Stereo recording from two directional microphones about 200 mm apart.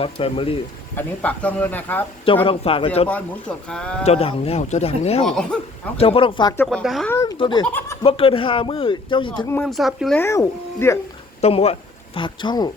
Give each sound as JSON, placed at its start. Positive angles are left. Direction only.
{"t": 0.0, "sound": "speech", "side_deg": 30}
{"t": 0.9, "sound": "speech", "side_deg": 5}
{"t": 2.2, "sound": "speech", "side_deg": 25}
{"t": 3.7, "sound": "speech", "side_deg": 5}
{"t": 4.0, "sound": "speech", "side_deg": 30}
{"t": 5.2, "sound": "speech", "side_deg": 5}
{"t": 6.0, "sound": "speech", "side_deg": 30}
{"t": 6.6, "sound": "speech", "side_deg": 5}
{"t": 7.1, "sound": "speech", "side_deg": 15}
{"t": 7.7, "sound": "speech", "side_deg": 10}
{"t": 8.0, "sound": "speech", "side_deg": 25}
{"t": 9.5, "sound": "speech", "side_deg": 5}
{"t": 10.2, "sound": "speech", "side_deg": 15}
{"t": 11.3, "sound": "speech", "side_deg": 30}